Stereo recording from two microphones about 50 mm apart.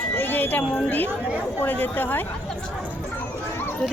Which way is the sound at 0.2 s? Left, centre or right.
Left.